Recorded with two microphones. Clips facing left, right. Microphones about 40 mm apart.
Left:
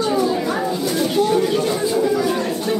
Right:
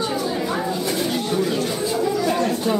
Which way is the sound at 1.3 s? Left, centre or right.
Centre.